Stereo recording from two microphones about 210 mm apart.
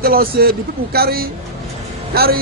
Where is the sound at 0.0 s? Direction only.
45° right (ahead or behind).